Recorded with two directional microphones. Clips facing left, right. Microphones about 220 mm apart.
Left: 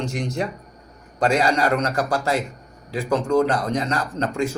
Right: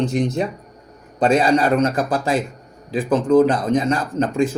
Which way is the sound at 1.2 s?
15° right (ahead or behind).